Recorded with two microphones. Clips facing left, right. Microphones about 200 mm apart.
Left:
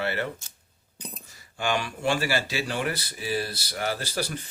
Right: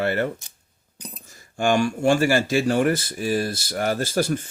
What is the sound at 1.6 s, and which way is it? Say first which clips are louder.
Speech: right 7 dB; 45° right (ahead or behind).